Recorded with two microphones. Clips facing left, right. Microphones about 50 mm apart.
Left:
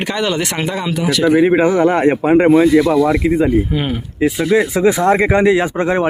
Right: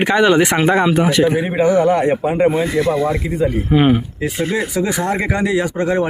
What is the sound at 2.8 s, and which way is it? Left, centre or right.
Speech, right.